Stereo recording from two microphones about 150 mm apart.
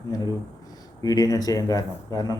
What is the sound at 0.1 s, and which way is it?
A man's voice, 25° left (ahead or behind).